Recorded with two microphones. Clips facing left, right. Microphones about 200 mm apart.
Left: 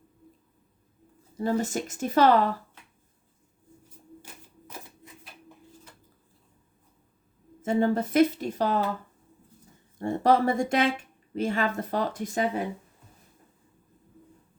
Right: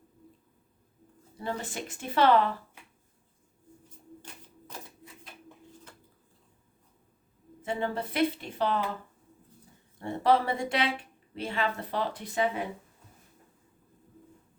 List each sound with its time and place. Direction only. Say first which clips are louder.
1.4 s a woman's voice: left 8 dB; 40° left (ahead or behind)
4.2 s typewriter: even; 10° left (ahead or behind)
7.6 s speech: left 8 dB; 45° left (ahead or behind)
10.0 s speech: left 3 dB; 45° left (ahead or behind)